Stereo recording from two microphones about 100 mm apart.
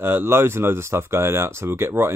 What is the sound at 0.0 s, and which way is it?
Speech, 25° right (ahead or behind).